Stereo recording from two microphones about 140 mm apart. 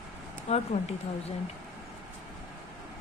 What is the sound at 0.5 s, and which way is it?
Speech, 45° left (ahead or behind).